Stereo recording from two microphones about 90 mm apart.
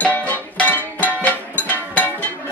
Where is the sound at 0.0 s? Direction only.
15° left (ahead or behind).